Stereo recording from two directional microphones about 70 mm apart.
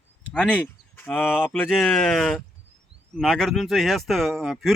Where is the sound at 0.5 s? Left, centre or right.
Left.